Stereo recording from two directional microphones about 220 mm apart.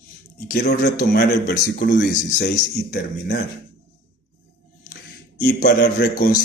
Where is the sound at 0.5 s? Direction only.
50° left (ahead or behind).